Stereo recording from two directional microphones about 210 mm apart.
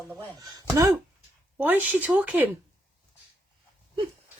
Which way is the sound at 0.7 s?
15° right (ahead or behind).